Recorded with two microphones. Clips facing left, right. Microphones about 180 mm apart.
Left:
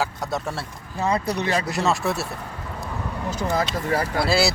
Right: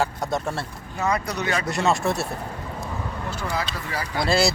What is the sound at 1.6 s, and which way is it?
Speech, centre (ahead or behind).